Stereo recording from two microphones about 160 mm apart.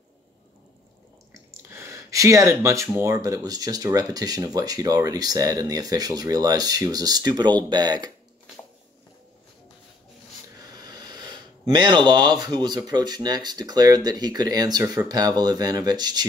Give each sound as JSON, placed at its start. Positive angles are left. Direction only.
{"t": 1.3, "sound": "speech", "side_deg": -15}
{"t": 10.7, "sound": "speech", "side_deg": -25}